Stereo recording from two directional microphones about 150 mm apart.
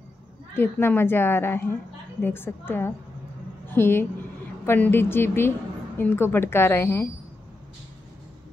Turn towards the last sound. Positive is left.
turn(degrees=15)  # may be behind; listen again after turning